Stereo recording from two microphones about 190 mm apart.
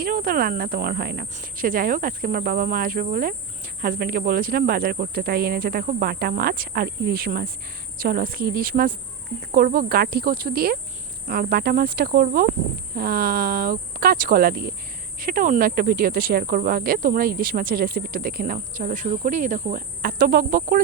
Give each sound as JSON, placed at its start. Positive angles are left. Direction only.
{"t": 0.0, "sound": "speech", "side_deg": -50}
{"t": 1.4, "sound": "speech", "side_deg": -45}